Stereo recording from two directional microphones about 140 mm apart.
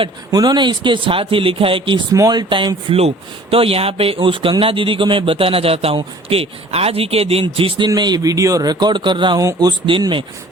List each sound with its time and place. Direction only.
0.3 s speech: 30° right (ahead or behind)
2.1 s speech: 25° right (ahead or behind)